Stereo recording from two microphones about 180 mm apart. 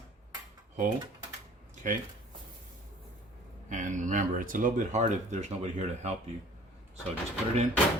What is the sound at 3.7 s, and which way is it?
Speech, 45° right (ahead or behind).